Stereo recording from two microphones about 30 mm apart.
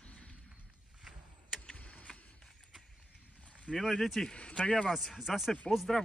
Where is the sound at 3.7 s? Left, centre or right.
Left.